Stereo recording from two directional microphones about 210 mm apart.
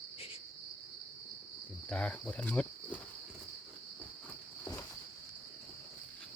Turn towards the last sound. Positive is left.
turn(degrees=10)  # may be behind; listen again after turning